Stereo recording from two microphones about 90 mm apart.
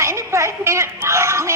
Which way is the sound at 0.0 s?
30° right (ahead or behind).